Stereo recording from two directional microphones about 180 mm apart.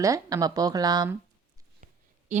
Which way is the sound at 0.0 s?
20° right (ahead or behind).